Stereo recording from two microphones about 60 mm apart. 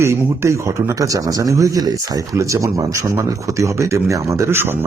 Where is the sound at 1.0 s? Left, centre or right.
Right.